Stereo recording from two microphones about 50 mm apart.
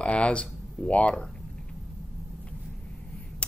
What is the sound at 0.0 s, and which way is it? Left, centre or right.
Speech, left.